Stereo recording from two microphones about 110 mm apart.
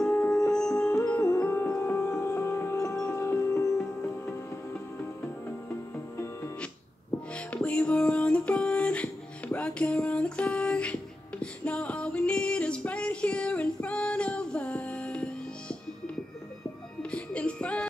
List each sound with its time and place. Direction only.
0.1 s music: 15° left (ahead or behind)
7.3 s music: 10° left (ahead or behind)
17.0 s music: 10° left (ahead or behind)